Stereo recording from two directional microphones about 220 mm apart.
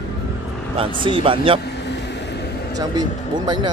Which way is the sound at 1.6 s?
50° left (ahead or behind).